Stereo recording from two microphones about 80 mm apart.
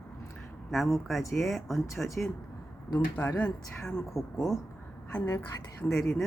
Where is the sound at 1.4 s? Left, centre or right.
Centre.